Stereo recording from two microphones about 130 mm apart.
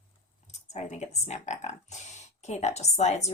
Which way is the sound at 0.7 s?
60° left (ahead or behind).